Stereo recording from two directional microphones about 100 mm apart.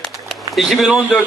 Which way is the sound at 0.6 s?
5° right (ahead or behind).